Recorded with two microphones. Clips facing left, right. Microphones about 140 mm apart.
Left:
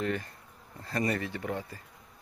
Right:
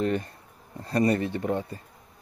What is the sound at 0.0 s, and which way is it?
Speech, 25° right (ahead or behind).